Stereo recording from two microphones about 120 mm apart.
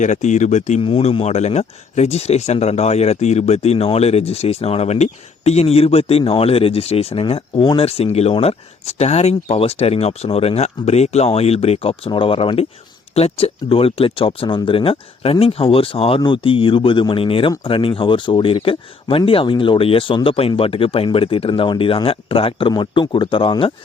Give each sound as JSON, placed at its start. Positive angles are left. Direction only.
{"t": 0.0, "sound": "speech", "side_deg": 85}
{"t": 0.8, "sound": "speech", "side_deg": 50}